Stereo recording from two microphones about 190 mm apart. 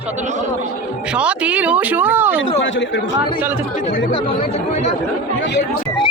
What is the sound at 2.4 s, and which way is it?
Speech, 80° left.